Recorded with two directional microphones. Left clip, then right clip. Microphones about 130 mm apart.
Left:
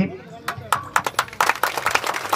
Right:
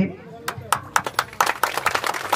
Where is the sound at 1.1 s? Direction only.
20° right (ahead or behind).